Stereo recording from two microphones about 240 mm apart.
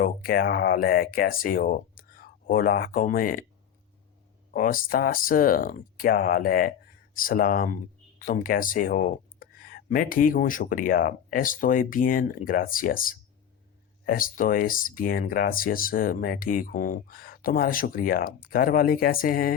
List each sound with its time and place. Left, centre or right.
0.0 s speech: left
4.5 s speech: left